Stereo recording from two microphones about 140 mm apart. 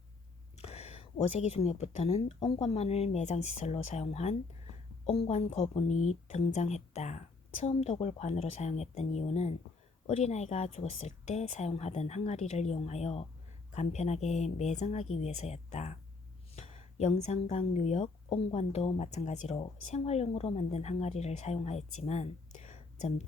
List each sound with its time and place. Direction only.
0.5 s a woman's voice: 50° left (ahead or behind)